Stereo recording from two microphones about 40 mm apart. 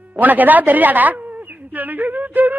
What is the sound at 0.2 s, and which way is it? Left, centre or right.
Speech, right.